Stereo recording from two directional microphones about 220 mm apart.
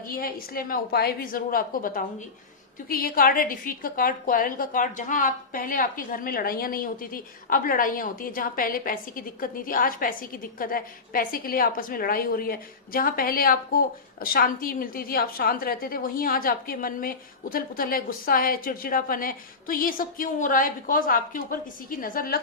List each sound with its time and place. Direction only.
0.1 s a woman's voice: 40° left (ahead or behind)